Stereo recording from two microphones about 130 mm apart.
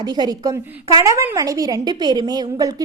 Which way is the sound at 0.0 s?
30° right (ahead or behind).